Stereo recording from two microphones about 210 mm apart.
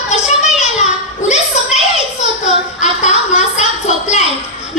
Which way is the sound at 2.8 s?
35° left (ahead or behind).